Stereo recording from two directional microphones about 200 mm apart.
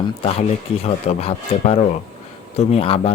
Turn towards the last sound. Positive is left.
turn(degrees=30)  # may be behind; listen again after turning